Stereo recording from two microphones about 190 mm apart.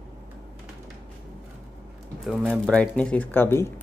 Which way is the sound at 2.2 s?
Centre (ahead or behind).